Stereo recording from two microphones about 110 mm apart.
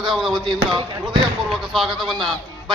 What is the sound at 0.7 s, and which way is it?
Speech, 45° right (ahead or behind).